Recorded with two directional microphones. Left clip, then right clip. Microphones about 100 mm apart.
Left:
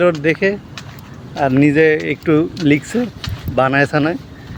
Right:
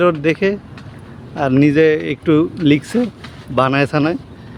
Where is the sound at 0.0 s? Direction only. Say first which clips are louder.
Even; 40° right (ahead or behind).